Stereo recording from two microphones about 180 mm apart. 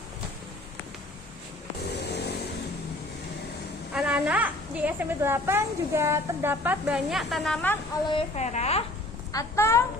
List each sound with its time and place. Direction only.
2.0 s vehicle: 70° left (ahead or behind)
3.9 s a woman's voice: 5° right (ahead or behind)
8.4 s a woman's voice: 40° left (ahead or behind)
9.3 s a woman's voice: 15° left (ahead or behind)